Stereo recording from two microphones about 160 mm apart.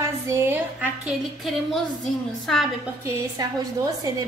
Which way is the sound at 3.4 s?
25° right (ahead or behind).